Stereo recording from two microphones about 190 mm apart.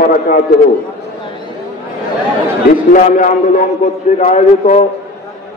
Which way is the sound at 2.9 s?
45° left (ahead or behind).